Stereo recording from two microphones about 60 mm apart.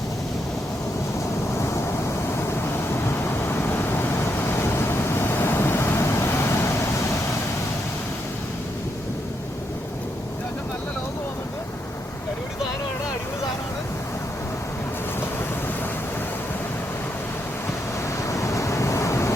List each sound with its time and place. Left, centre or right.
2.5 s vehicle: left
6.0 s vehicle: left
18.3 s waves: left